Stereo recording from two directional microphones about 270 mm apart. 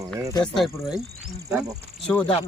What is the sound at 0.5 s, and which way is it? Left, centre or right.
Speech, centre.